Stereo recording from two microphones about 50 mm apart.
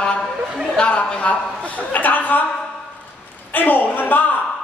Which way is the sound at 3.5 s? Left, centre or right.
Left.